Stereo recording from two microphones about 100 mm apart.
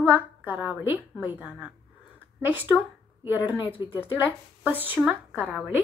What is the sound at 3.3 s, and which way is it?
A woman's voice, 20° right (ahead or behind).